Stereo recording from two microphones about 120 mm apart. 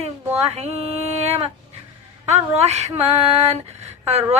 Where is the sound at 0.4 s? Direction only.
60° right (ahead or behind).